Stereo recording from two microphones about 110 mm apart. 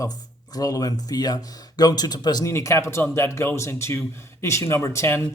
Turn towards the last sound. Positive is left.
turn(degrees=25)  # may be behind; listen again after turning